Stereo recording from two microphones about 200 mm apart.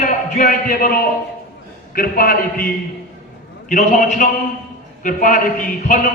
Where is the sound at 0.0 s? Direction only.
40° left (ahead or behind).